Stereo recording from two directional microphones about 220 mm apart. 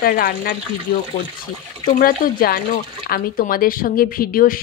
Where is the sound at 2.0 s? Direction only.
40° left (ahead or behind).